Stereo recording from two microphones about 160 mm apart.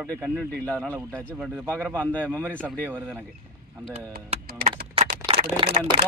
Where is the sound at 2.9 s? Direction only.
15° right (ahead or behind).